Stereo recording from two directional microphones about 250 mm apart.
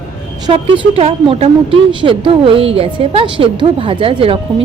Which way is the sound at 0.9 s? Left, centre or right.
Right.